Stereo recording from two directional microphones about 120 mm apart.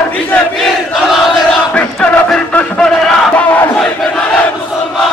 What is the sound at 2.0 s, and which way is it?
Music, 5° left (ahead or behind).